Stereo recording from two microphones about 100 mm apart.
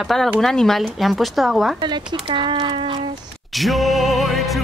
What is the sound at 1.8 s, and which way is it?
Speech, 50° right (ahead or behind).